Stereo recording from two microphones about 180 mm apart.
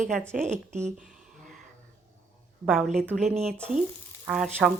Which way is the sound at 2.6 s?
Centre (ahead or behind).